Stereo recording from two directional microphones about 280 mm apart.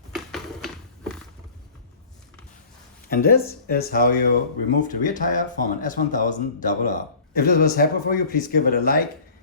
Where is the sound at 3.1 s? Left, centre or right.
Left.